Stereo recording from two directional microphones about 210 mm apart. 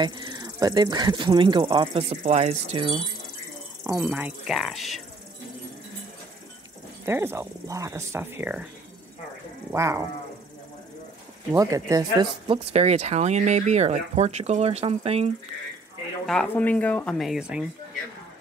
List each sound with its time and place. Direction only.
0.0 s speech: 20° right (ahead or behind)
3.8 s speech: 10° right (ahead or behind)
7.1 s speech: 10° right (ahead or behind)
9.7 s speech: 15° right (ahead or behind)
11.5 s speech: 15° right (ahead or behind)
16.3 s speech: 5° left (ahead or behind)